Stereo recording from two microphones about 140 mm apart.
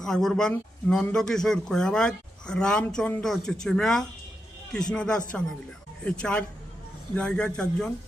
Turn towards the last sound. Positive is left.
turn(degrees=5)  # may be behind; listen again after turning